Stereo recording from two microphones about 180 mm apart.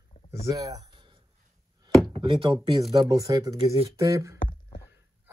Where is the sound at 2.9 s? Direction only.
20° right (ahead or behind).